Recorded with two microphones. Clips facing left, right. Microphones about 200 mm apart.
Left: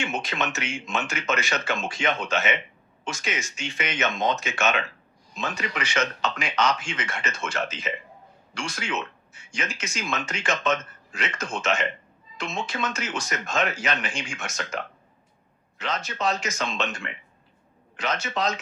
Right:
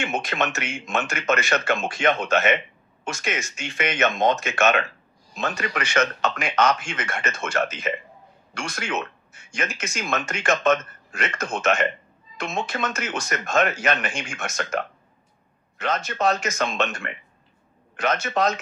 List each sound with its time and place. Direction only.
0.0 s speech: 55° right (ahead or behind)
16.0 s speech: 50° right (ahead or behind)